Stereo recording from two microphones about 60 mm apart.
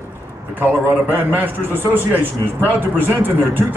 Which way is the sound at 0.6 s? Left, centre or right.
Right.